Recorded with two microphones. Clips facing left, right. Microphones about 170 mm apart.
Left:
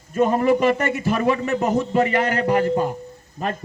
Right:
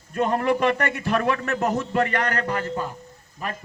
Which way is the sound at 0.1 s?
5° left (ahead or behind).